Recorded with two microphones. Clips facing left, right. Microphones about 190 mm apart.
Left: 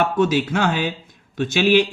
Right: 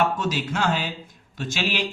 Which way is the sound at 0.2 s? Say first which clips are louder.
Left 7 dB; 60° left (ahead or behind).